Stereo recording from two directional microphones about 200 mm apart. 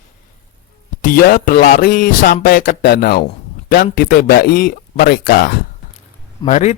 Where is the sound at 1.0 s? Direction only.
45° left (ahead or behind).